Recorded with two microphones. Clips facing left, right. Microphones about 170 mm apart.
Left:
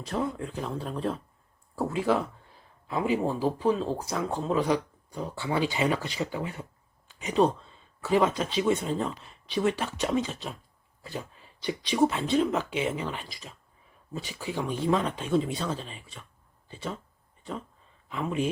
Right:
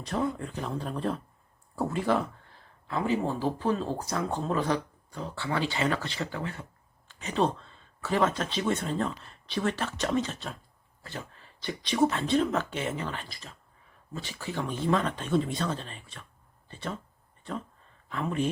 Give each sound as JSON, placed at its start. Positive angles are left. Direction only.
{"t": 0.0, "sound": "speech", "side_deg": 0}
{"t": 2.8, "sound": "speech", "side_deg": 15}
{"t": 11.6, "sound": "speech", "side_deg": 10}
{"t": 18.1, "sound": "speech", "side_deg": 5}